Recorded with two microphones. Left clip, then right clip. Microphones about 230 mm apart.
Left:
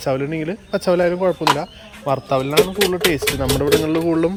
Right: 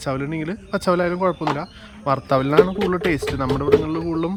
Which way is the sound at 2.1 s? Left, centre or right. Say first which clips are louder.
Even; centre.